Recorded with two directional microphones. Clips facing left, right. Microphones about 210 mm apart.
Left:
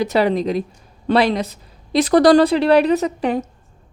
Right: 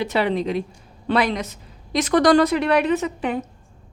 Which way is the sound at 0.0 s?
40° left (ahead or behind).